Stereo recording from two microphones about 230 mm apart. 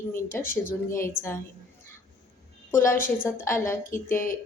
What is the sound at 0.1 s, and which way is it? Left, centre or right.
Speech, centre.